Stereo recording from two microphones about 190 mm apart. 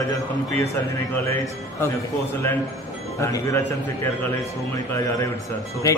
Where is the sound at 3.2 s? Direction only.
15° left (ahead or behind).